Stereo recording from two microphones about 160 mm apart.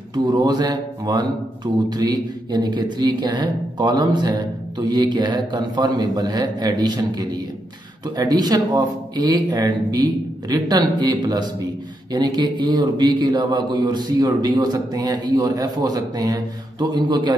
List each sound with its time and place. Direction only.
0.1 s a man's voice: 25° right (ahead or behind)